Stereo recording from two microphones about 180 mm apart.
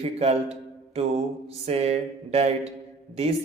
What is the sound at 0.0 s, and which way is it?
Mantra, 35° right (ahead or behind).